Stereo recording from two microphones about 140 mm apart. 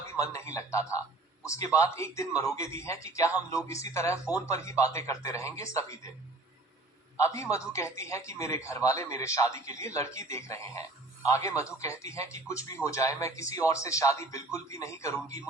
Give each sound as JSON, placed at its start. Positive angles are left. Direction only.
{"t": 0.1, "sound": "speech", "side_deg": 20}
{"t": 7.2, "sound": "speech", "side_deg": 20}